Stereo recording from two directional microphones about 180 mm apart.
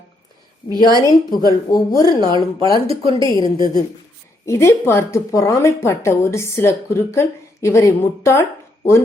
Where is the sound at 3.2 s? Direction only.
20° left (ahead or behind).